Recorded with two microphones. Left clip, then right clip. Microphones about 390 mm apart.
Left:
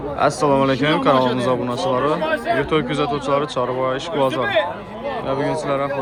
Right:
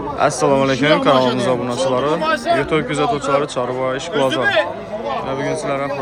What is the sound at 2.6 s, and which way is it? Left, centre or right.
Speech, centre.